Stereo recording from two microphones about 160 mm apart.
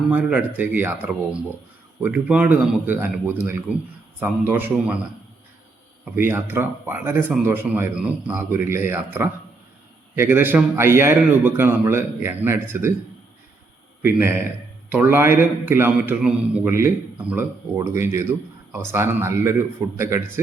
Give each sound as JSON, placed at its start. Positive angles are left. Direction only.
{"t": 0.1, "sound": "speech", "side_deg": -10}
{"t": 6.1, "sound": "speech", "side_deg": -15}
{"t": 14.8, "sound": "speech", "side_deg": -10}